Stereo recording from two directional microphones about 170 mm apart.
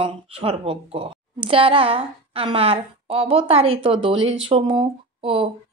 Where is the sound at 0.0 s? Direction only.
35° right (ahead or behind).